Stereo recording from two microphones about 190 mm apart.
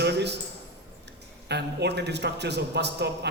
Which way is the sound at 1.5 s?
60° right (ahead or behind).